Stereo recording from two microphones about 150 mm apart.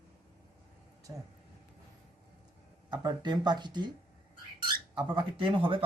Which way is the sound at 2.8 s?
30° right (ahead or behind).